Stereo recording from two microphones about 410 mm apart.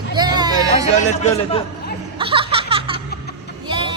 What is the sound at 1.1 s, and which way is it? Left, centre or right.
Speech, centre.